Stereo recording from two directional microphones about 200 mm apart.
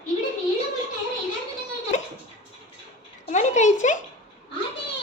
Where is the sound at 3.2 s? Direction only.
35° left (ahead or behind).